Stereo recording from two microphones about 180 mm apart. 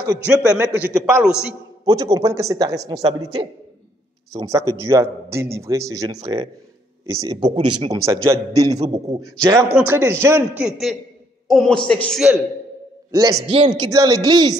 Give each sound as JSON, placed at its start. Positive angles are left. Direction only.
{"t": 0.5, "sound": "a man's voice", "side_deg": -10}
{"t": 1.9, "sound": "a woman's voice", "side_deg": -20}
{"t": 8.0, "sound": "a man's voice", "side_deg": -15}
{"t": 10.6, "sound": "a man's voice", "side_deg": 0}
{"t": 13.1, "sound": "a woman's voice", "side_deg": -20}